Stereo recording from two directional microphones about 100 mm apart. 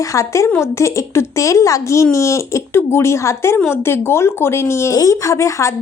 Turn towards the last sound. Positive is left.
turn(degrees=30)  # may be behind; listen again after turning